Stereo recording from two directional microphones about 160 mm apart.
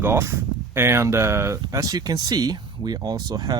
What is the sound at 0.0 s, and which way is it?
Speech, 15° right (ahead or behind).